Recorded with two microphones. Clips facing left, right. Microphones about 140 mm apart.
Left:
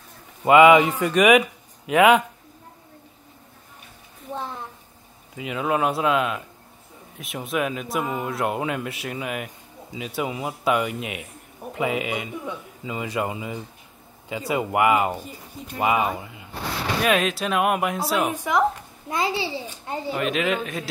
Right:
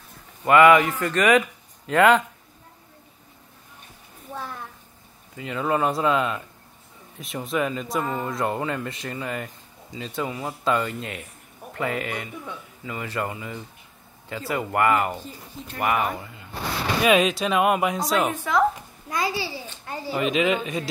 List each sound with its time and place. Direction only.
0.5 s speech: 20° left (ahead or behind)
4.3 s a sound: 25° left (ahead or behind)
5.3 s speech: 10° left (ahead or behind)
17.0 s speech: centre (ahead or behind)
19.0 s a child's voice: 25° left (ahead or behind)
20.1 s speech: centre (ahead or behind)